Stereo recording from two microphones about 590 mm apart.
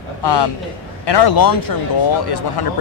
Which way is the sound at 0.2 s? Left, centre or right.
Left.